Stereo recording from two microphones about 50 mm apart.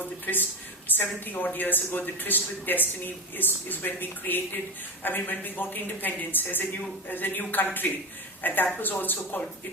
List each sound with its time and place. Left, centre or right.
0.0 s a man's voice: left